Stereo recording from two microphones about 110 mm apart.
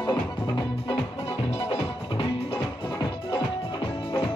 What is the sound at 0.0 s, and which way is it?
Music, 40° left (ahead or behind).